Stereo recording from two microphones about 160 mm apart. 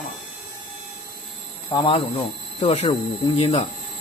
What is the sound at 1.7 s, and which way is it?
Speech, 30° left (ahead or behind).